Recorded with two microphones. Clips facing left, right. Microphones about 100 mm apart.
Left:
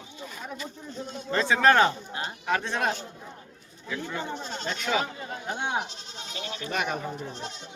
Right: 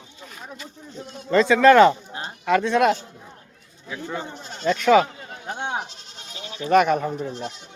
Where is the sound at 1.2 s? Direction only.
90° right.